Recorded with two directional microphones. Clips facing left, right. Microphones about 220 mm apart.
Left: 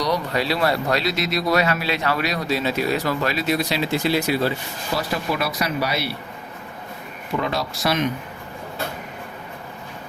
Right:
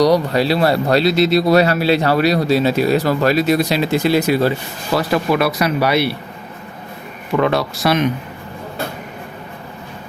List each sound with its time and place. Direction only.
0.0 s speech: 35° right (ahead or behind)
4.9 s speech: 65° right (ahead or behind)
7.3 s speech: 65° right (ahead or behind)